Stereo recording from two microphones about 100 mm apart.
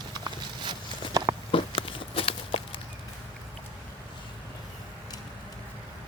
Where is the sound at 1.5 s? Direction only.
60° left (ahead or behind).